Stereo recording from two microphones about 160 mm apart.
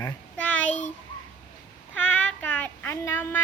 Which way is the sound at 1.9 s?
10° left (ahead or behind).